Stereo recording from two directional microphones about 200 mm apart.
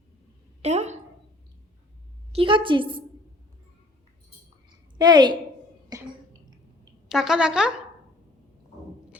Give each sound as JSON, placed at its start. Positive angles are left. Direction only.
{"t": 0.6, "sound": "a woman's voice", "side_deg": -35}
{"t": 2.3, "sound": "a woman's voice", "side_deg": -25}
{"t": 4.9, "sound": "a woman's voice", "side_deg": -20}
{"t": 5.9, "sound": "cough", "side_deg": -20}
{"t": 7.1, "sound": "speech", "side_deg": 0}